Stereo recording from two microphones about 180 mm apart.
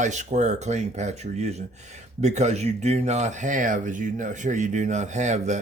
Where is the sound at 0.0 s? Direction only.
40° right (ahead or behind).